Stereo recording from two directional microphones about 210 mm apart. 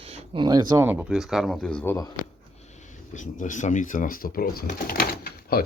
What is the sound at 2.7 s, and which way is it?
Speech, 35° left (ahead or behind).